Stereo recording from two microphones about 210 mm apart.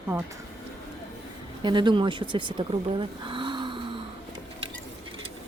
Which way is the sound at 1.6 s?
20° right (ahead or behind).